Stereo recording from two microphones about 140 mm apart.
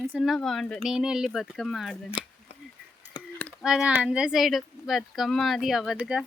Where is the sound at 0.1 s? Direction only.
Centre (ahead or behind).